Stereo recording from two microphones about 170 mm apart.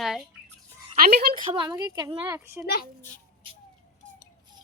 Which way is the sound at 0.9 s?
60° right (ahead or behind).